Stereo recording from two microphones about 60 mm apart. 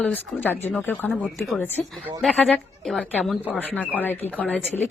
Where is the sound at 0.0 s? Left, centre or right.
Left.